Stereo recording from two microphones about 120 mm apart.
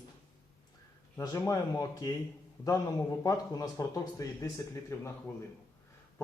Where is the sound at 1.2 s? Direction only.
25° left (ahead or behind).